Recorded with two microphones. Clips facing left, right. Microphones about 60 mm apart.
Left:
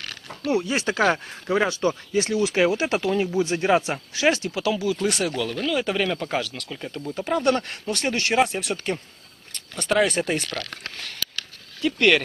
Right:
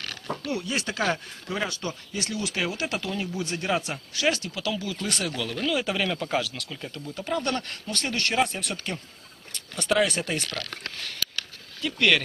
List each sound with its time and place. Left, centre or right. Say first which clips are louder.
0.5 s speech: left 8 dB; left; by 6.7 s centre
6.7 s speech: left 5 dB; centre
11.8 s speech: left 4 dB; centre